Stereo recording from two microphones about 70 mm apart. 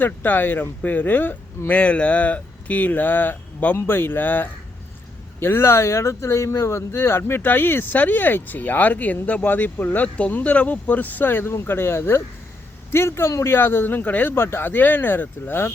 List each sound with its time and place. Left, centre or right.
0.0 s speech: left